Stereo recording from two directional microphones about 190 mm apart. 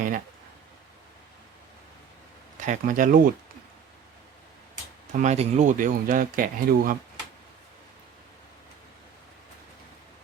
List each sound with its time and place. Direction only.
2.6 s speech: 45° right (ahead or behind)
5.1 s speech: 35° right (ahead or behind)